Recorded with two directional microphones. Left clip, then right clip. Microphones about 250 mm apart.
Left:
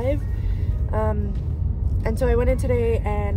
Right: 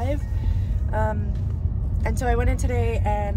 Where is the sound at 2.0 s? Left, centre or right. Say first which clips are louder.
Left 4 dB; centre.